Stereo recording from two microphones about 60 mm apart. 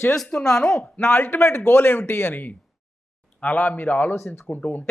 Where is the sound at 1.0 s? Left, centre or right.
Left.